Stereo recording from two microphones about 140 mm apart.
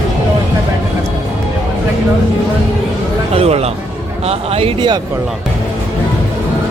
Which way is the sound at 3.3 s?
45° right (ahead or behind).